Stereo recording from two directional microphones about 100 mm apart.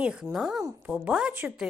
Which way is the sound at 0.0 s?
10° right (ahead or behind).